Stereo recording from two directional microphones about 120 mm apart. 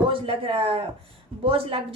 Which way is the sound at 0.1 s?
50° right (ahead or behind).